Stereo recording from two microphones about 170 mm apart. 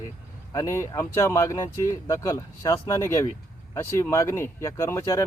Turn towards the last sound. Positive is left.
turn(degrees=15)  # may be behind; listen again after turning